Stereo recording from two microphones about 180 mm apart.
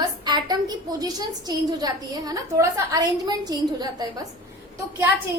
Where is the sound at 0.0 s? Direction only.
25° right (ahead or behind).